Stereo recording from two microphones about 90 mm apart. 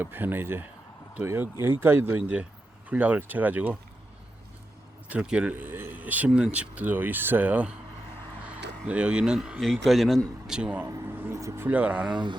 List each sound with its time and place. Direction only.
0.0 s speech: 20° right (ahead or behind)
5.0 s a man's voice: 15° right (ahead or behind)
10.4 s speech: 10° right (ahead or behind)
10.8 s speech: 35° right (ahead or behind)
11.6 s speech: 15° right (ahead or behind)
12.1 s speech: 55° right (ahead or behind)